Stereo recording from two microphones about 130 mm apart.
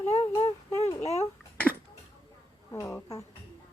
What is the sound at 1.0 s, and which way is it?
Speech, 55° left (ahead or behind).